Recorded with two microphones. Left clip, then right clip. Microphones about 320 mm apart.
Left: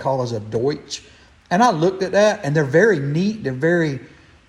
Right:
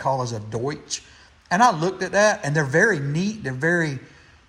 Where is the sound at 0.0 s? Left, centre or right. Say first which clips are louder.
Left 2 dB; centre.